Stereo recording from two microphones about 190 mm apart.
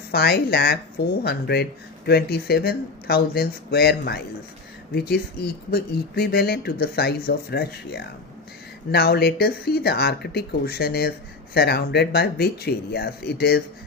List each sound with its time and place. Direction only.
0.1 s speech: 60° left (ahead or behind)